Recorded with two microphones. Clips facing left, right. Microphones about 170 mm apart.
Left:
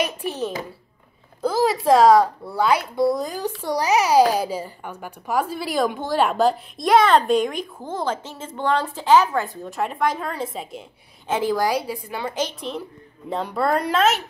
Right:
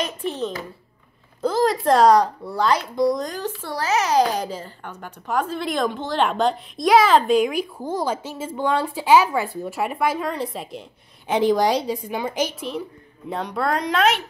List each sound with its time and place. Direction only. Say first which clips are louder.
0.0 s a child's voice: left 1 dB; 10° left (ahead or behind)
11.2 s a woman's voice: right 3 dB; 20° right (ahead or behind); by 14.2 s centre (ahead or behind)